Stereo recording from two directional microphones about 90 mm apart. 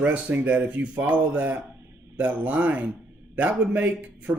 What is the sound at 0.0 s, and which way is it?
Speech, 15° right (ahead or behind).